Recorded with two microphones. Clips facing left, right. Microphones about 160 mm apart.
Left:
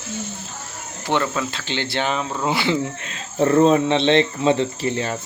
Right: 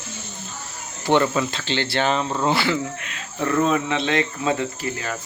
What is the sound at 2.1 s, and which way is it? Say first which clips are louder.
Speech: right 2 dB; centre (ahead or behind).